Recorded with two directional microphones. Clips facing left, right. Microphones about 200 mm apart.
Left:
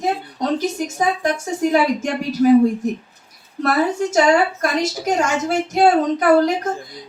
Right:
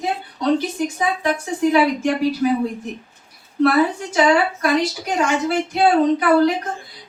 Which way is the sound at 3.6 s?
45° left (ahead or behind).